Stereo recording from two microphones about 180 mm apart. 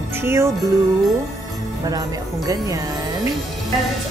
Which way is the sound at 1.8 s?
20° right (ahead or behind).